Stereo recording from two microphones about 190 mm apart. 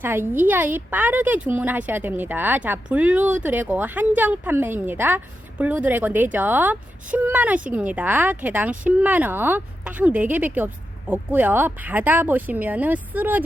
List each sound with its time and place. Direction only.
0.0 s speech: 10° right (ahead or behind)